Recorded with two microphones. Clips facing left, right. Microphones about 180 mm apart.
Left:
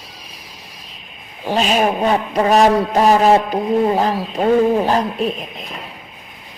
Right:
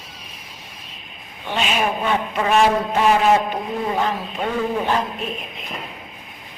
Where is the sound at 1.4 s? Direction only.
40° left (ahead or behind).